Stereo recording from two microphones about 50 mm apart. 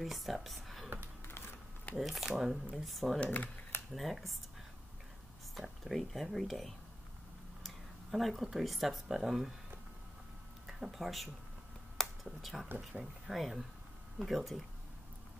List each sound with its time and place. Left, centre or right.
0.0 s speech: centre
2.0 s speech: centre
3.3 s speech: left
3.9 s speech: centre
5.5 s speech: centre
10.7 s speech: centre
12.0 s a sound: centre
13.0 s speech: centre